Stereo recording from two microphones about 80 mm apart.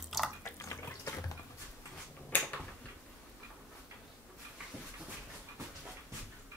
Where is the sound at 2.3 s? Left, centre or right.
Left.